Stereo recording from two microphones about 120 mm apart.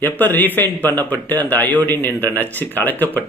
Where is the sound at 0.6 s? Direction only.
15° left (ahead or behind).